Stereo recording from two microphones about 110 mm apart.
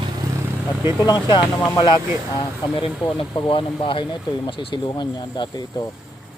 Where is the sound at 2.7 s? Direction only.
55° left (ahead or behind).